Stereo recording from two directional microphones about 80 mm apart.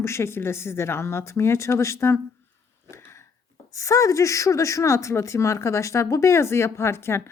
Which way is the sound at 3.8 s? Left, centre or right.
Left.